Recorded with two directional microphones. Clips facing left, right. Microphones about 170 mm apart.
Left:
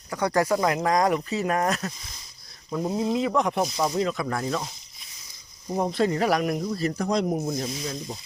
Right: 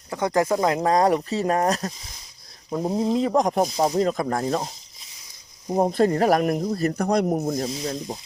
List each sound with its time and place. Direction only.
0.1 s speech: 20° right (ahead or behind); by 4.7 s 35° right (ahead or behind)
5.7 s speech: 45° right (ahead or behind)
7.4 s speech: 45° right (ahead or behind)